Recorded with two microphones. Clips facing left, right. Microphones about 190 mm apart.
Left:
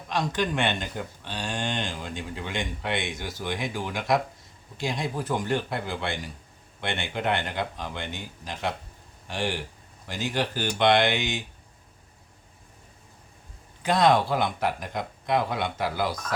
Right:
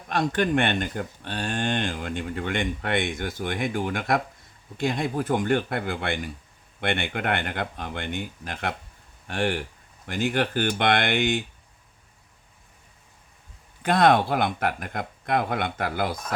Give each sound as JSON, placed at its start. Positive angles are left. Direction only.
{"t": 0.1, "sound": "speech", "side_deg": -55}
{"t": 13.8, "sound": "speech", "side_deg": -55}